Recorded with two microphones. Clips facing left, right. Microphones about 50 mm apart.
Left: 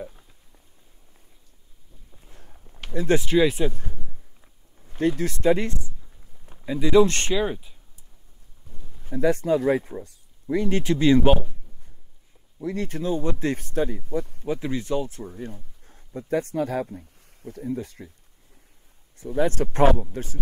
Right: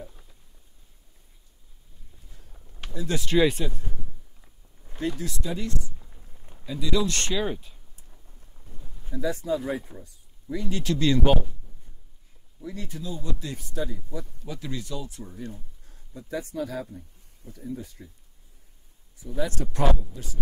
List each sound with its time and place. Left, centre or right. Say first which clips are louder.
2.2 s a sound: left 6 dB; left
2.9 s speech: left 9 dB; left
3.6 s speech: left 7 dB; centre
4.9 s speech: left 7 dB; left
6.6 s speech: left 9 dB; left
7.3 s speech: left 3 dB; centre
9.1 s speech: left 6 dB; left
10.8 s speech: left 4 dB; left
12.5 s speech: left 8 dB; left
14.4 s speech: left 8 dB; left
19.1 s speech: left 7 dB; left